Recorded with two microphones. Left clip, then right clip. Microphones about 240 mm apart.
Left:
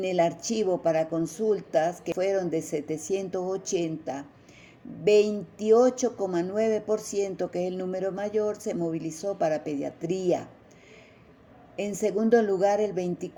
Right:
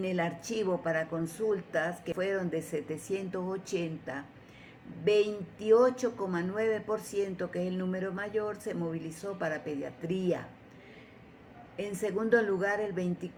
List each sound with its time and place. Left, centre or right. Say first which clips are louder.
0.0 s speech: left 8 dB; left
12.1 s speech: left 4 dB; left